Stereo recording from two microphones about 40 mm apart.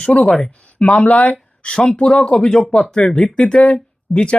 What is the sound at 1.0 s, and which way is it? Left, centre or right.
Speech, left.